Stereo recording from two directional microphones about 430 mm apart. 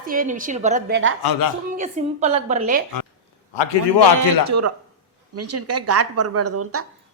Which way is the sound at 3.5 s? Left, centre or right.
Left.